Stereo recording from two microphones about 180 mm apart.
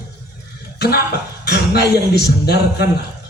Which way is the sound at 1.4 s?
65° left (ahead or behind).